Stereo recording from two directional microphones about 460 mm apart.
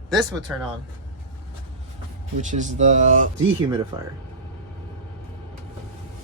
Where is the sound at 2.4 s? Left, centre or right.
Centre.